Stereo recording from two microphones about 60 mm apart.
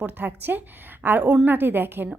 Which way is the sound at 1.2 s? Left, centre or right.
Centre.